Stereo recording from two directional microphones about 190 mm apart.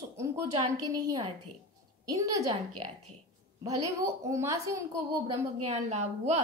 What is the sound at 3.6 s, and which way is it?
A woman's voice, 20° right (ahead or behind).